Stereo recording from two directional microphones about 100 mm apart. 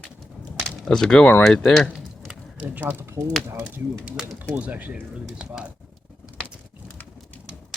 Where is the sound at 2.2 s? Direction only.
15° right (ahead or behind).